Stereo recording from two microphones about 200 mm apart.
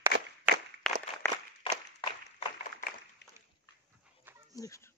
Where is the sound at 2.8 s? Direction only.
50° left (ahead or behind).